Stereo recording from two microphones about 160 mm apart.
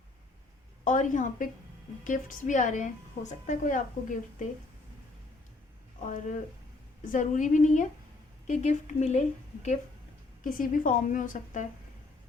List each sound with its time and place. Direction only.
0.9 s a woman's voice: 55° left (ahead or behind)
6.0 s a woman's voice: 50° left (ahead or behind)
10.4 s a woman's voice: 60° left (ahead or behind)